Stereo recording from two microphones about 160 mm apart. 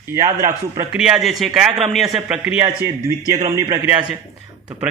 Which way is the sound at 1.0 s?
Centre (ahead or behind).